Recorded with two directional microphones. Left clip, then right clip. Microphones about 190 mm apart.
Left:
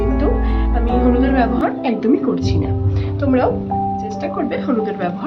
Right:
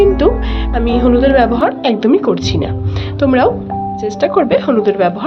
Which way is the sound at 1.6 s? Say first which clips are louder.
Right 5 dB; 50° right (ahead or behind).